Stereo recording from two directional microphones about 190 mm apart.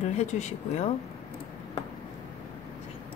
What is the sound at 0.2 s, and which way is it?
Speech, 40° left (ahead or behind).